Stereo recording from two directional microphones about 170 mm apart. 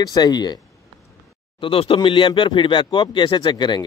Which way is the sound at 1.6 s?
35° left (ahead or behind).